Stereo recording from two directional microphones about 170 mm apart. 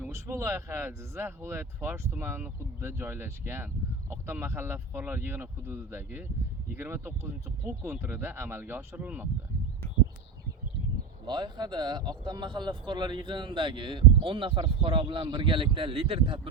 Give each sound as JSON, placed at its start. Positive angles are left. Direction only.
{"t": 0.0, "sound": "speech", "side_deg": -15}
{"t": 11.3, "sound": "speech", "side_deg": -25}